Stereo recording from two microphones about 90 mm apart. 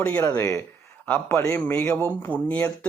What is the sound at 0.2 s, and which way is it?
Speech, 25° left (ahead or behind).